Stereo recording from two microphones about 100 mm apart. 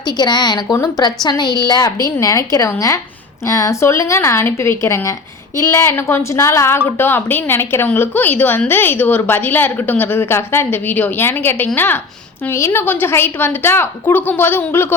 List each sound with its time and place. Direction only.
0.2 s a woman's voice: 45° left (ahead or behind); by 14.9 s 20° left (ahead or behind)